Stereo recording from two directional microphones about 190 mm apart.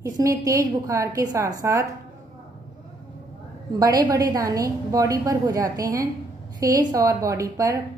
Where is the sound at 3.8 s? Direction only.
20° right (ahead or behind).